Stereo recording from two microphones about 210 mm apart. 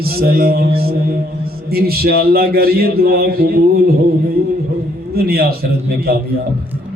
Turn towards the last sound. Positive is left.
turn(degrees=-45)  # may be behind; listen again after turning